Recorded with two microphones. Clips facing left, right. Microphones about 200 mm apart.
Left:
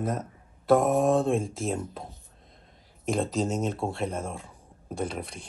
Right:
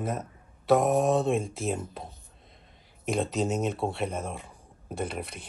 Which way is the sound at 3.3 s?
Centre (ahead or behind).